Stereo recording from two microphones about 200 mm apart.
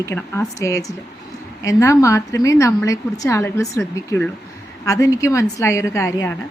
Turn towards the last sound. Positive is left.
turn(degrees=15)  # may be behind; listen again after turning